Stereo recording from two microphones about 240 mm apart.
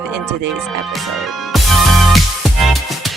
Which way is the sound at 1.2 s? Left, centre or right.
Centre.